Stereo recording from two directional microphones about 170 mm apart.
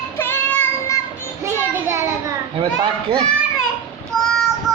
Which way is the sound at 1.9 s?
15° right (ahead or behind).